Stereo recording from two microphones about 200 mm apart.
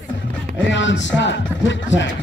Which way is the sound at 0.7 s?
65° left (ahead or behind).